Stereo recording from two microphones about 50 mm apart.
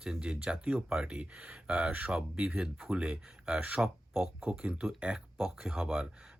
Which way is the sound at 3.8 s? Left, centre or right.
Centre.